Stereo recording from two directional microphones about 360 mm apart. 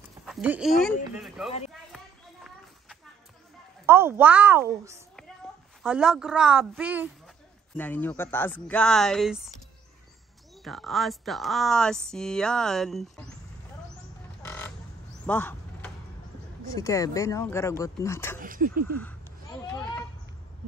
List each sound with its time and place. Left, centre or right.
0.2 s speech: centre
3.8 s a woman's voice: centre
10.6 s speech: centre
14.4 s a sound: centre
16.7 s speech: centre
18.4 s speech: right